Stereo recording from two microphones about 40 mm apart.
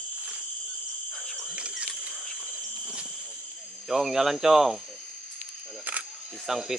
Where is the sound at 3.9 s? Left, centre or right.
Centre.